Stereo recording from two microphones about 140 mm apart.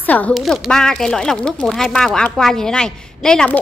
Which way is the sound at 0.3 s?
Centre (ahead or behind).